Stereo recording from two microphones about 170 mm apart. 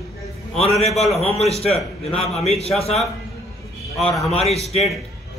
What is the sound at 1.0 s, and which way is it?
A man's voice, 40° left (ahead or behind).